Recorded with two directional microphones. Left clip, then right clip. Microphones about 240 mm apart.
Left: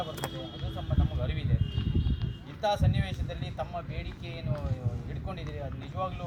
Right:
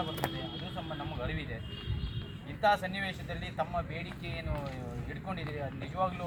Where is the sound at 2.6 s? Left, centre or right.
Left.